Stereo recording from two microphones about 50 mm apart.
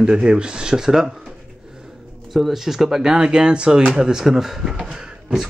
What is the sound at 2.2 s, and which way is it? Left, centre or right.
Speech, centre.